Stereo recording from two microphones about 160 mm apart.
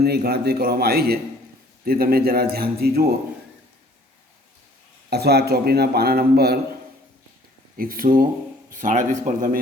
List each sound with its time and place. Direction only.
0.0 s a man's voice: 80° right
5.0 s a man's voice: 90° right
7.8 s speech: 65° right (ahead or behind)
8.7 s speech: 50° right (ahead or behind)